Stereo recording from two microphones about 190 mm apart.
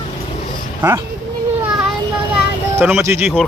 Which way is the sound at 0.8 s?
10° right (ahead or behind).